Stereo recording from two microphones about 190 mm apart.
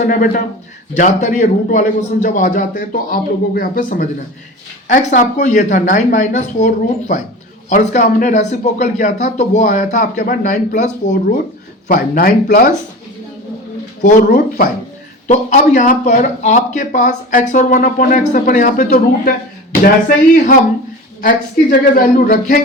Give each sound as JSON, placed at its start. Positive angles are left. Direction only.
{"t": 0.0, "sound": "a man's voice", "side_deg": 45}
{"t": 14.0, "sound": "a man's voice", "side_deg": 45}
{"t": 21.2, "sound": "a man's voice", "side_deg": 45}